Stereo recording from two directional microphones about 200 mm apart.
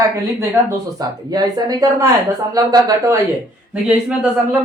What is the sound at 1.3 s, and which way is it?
Speech, 20° right (ahead or behind).